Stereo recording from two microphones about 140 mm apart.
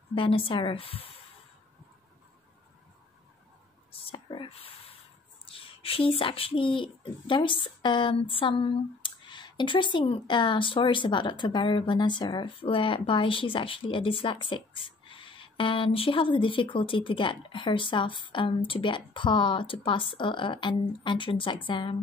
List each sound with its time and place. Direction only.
0.1 s speech: 40° left (ahead or behind)
4.1 s speech: 40° left (ahead or behind)